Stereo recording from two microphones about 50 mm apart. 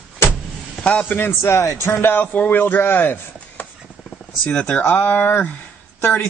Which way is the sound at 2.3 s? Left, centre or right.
Left.